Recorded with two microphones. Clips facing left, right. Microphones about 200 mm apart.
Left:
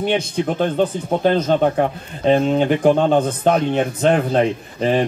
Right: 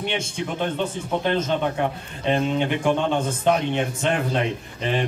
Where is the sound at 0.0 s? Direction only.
40° left (ahead or behind).